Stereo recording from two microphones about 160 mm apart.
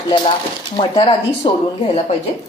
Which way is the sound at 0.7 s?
30° left (ahead or behind).